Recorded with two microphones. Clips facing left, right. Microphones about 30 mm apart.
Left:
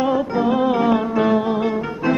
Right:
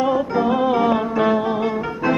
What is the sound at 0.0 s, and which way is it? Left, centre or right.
Music, centre.